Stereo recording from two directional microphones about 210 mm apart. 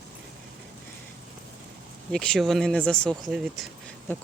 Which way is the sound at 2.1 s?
5° left (ahead or behind).